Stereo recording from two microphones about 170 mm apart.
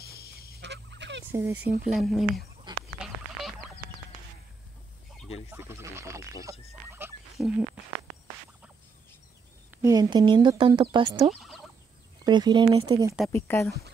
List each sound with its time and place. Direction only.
0.0 s fowl: 65° left (ahead or behind)
0.6 s a sound: 90° right
1.3 s speech: 15° right (ahead or behind)
1.9 s speech: centre (ahead or behind)
2.7 s goat: 25° right (ahead or behind)
3.0 s a sound: centre (ahead or behind)
5.5 s speech: 15° right (ahead or behind)
7.3 s a sound: 5° right (ahead or behind)
9.8 s speech: 20° right (ahead or behind)
11.2 s fowl: centre (ahead or behind)
12.3 s speech: 25° right (ahead or behind)
13.3 s speech: 15° left (ahead or behind)